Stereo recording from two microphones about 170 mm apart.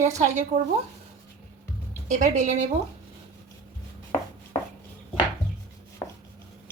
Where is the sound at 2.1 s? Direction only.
45° right (ahead or behind).